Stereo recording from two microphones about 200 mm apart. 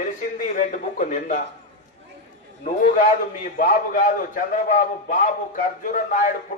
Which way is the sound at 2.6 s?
40° left (ahead or behind).